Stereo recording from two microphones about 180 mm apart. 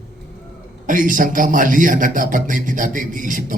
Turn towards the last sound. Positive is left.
turn(degrees=-45)  # may be behind; listen again after turning